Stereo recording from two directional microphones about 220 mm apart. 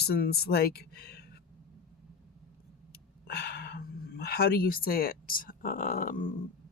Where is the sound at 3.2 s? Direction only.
45° left (ahead or behind).